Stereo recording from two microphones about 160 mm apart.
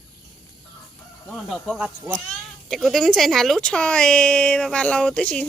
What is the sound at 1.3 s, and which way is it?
Speech, centre (ahead or behind).